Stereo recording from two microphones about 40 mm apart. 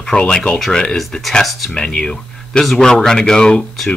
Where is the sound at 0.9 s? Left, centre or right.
Centre.